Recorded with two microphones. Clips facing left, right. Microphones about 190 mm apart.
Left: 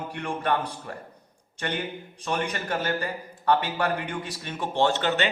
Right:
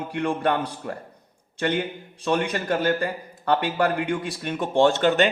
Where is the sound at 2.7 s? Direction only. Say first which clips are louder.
Right 6 dB; 50° right (ahead or behind).